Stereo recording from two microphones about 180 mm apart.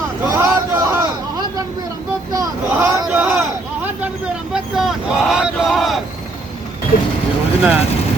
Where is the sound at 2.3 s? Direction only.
20° right (ahead or behind); by 6.0 s centre (ahead or behind).